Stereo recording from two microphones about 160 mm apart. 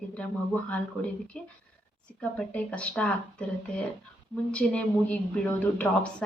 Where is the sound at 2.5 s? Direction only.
10° left (ahead or behind).